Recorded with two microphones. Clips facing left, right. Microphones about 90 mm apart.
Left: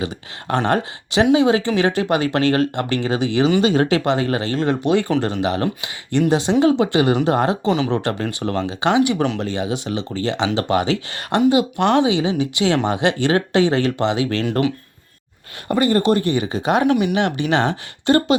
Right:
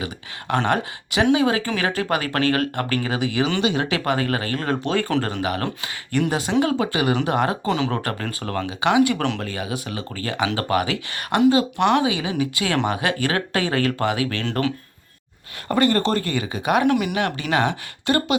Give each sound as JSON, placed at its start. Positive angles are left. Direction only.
{"t": 0.0, "sound": "speech", "side_deg": 35}
{"t": 3.6, "sound": "speech", "side_deg": 40}
{"t": 15.7, "sound": "speech", "side_deg": 15}